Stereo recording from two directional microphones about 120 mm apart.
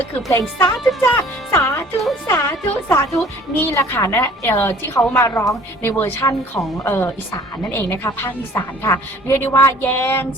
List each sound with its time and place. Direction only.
0.3 s a woman's voice: 20° left (ahead or behind)